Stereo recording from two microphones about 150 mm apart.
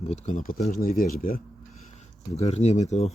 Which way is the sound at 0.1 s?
55° left (ahead or behind).